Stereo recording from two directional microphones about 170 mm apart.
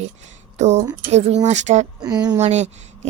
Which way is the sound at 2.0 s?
25° right (ahead or behind).